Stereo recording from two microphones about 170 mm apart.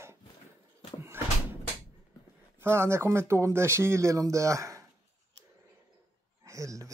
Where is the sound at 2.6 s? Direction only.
15° right (ahead or behind).